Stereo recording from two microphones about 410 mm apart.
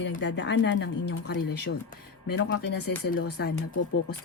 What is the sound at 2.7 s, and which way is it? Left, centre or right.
Speech, left.